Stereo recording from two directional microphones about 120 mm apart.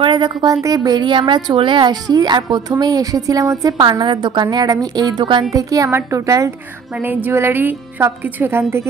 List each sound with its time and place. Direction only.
0.0 s a woman's voice: 40° right (ahead or behind)
7.0 s a woman's voice: 15° right (ahead or behind)